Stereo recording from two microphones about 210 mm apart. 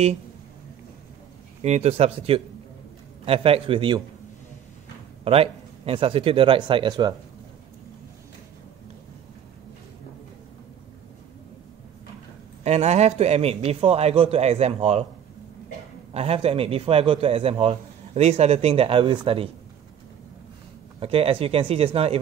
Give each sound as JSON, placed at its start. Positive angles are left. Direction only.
{"t": 1.6, "sound": "a man's voice", "side_deg": -30}
{"t": 5.2, "sound": "a man's voice", "side_deg": -25}
{"t": 12.6, "sound": "a man's voice", "side_deg": -30}
{"t": 16.1, "sound": "a man's voice", "side_deg": -30}
{"t": 21.0, "sound": "a man's voice", "side_deg": -25}